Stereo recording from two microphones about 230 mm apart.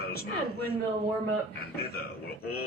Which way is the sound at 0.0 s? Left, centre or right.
Left.